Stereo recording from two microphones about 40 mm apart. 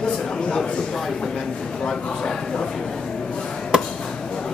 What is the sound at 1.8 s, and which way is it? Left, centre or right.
Speech, centre.